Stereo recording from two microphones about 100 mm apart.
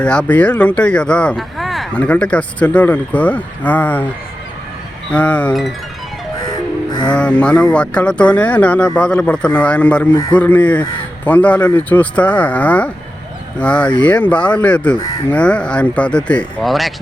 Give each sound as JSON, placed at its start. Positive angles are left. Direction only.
{"t": 0.0, "sound": "speech", "side_deg": 10}
{"t": 1.4, "sound": "a sound", "side_deg": 0}
{"t": 1.9, "sound": "speech", "side_deg": 10}
{"t": 5.1, "sound": "speech", "side_deg": 15}
{"t": 7.1, "sound": "speech", "side_deg": 10}
{"t": 10.1, "sound": "a man's voice", "side_deg": 45}
{"t": 10.3, "sound": "speech", "side_deg": 15}
{"t": 16.6, "sound": "speech", "side_deg": 0}